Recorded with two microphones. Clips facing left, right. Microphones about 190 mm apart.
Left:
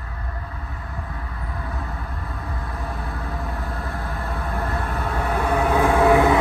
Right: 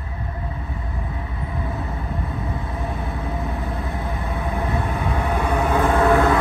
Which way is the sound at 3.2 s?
Centre (ahead or behind).